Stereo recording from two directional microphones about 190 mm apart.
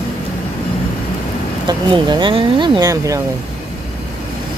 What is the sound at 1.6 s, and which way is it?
Speech, 25° right (ahead or behind).